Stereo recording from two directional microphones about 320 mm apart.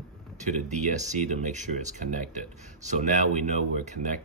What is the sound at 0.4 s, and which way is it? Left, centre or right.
Speech, right.